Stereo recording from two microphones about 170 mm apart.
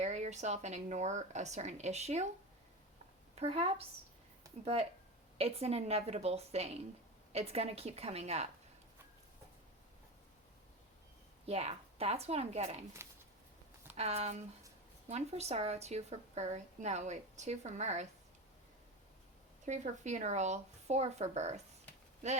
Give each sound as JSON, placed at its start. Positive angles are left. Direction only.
{"t": 0.0, "sound": "speech", "side_deg": -45}
{"t": 3.3, "sound": "a woman's voice", "side_deg": -35}
{"t": 11.4, "sound": "a woman's voice", "side_deg": -35}
{"t": 13.0, "sound": "a sound", "side_deg": -15}
{"t": 13.9, "sound": "a woman's voice", "side_deg": -35}
{"t": 19.6, "sound": "speech", "side_deg": -45}